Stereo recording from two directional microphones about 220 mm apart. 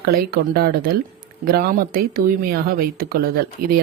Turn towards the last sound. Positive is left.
turn(degrees=-45)  # may be behind; listen again after turning